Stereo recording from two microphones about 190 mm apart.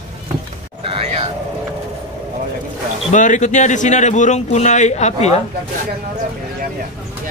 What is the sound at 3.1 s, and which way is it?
A man's voice, 40° left (ahead or behind).